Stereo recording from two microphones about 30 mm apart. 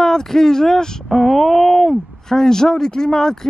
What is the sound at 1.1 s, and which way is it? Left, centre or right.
Speech, centre.